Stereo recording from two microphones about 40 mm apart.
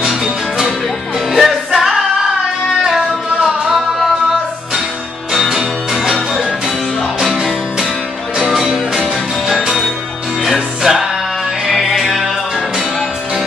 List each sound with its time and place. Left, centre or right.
0.0 s music: centre
1.9 s singing: centre
5.3 s music: centre
8.9 s music: centre